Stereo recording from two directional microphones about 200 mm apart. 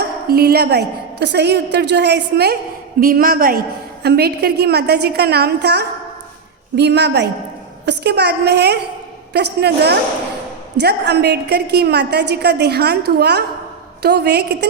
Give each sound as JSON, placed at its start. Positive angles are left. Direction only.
{"t": 0.0, "sound": "a woman's voice", "side_deg": -50}